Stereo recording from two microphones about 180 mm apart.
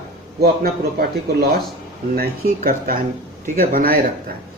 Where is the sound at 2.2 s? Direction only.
50° right (ahead or behind).